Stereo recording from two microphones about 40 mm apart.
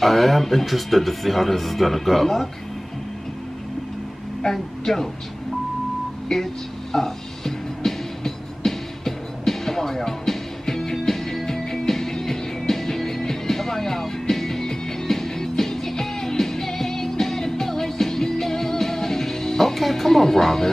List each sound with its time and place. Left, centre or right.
0.0 s speech: centre
4.4 s speech: centre
6.2 s music: centre